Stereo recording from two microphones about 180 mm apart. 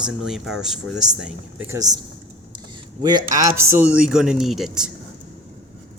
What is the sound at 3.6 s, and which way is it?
Speech, 10° right (ahead or behind).